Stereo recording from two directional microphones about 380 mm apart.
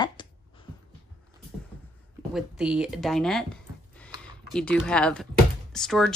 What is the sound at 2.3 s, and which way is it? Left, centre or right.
Speech, centre.